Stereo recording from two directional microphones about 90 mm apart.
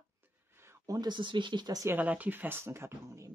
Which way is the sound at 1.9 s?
20° right (ahead or behind).